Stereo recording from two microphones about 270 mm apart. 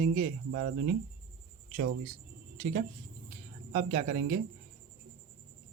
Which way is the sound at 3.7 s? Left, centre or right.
Right.